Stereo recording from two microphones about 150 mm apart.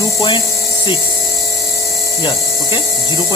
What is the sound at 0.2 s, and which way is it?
Speech, 35° left (ahead or behind).